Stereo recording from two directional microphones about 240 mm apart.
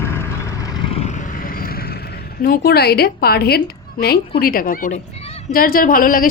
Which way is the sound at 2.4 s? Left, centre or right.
Left.